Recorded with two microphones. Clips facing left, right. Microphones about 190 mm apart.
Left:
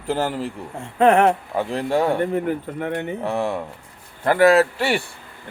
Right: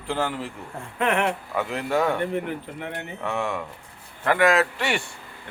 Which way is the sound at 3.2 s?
35° left (ahead or behind).